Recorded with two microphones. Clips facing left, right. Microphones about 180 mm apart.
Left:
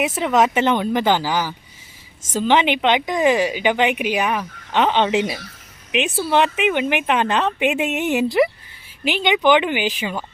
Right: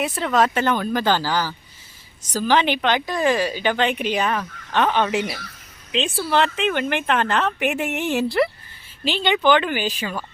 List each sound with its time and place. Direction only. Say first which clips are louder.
0.0 s a woman's voice: left 2 dB; 20° left (ahead or behind)